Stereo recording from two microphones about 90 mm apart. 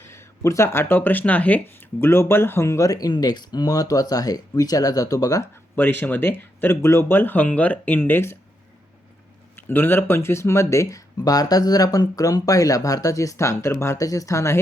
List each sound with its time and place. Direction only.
0.0 s speech: 30° left (ahead or behind)
5.7 s speech: 20° left (ahead or behind)
9.6 s speech: 25° left (ahead or behind)